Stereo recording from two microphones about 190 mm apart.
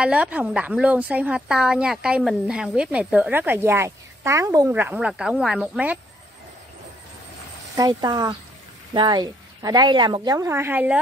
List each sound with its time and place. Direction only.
0.0 s a woman's voice: 5° right (ahead or behind)
7.7 s a woman's voice: 20° right (ahead or behind)